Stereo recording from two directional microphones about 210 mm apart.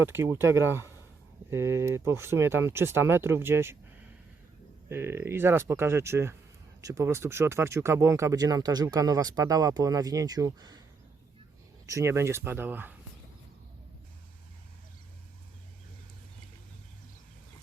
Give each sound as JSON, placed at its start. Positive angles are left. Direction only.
{"t": 0.0, "sound": "speech", "side_deg": -10}
{"t": 4.9, "sound": "speech", "side_deg": -10}
{"t": 11.9, "sound": "speech", "side_deg": -15}